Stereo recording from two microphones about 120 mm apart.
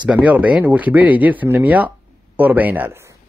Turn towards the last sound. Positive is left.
turn(degrees=-15)  # may be behind; listen again after turning